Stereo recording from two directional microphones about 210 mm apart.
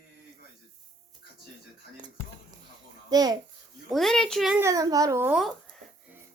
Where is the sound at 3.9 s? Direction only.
Centre (ahead or behind).